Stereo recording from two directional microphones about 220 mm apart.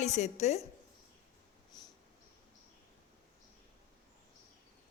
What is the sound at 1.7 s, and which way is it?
Insect, 20° left (ahead or behind).